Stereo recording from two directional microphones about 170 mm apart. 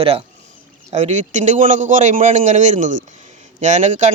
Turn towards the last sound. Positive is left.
turn(degrees=-45)  # may be behind; listen again after turning